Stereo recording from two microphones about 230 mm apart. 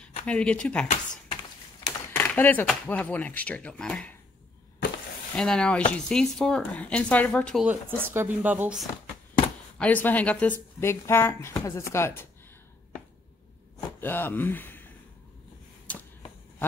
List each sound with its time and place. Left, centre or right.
0.3 s speech: centre
1.9 s speech: centre
5.3 s speech: centre
7.6 s speech: centre
9.8 s speech: centre
14.0 s speech: centre
15.9 s arrow: centre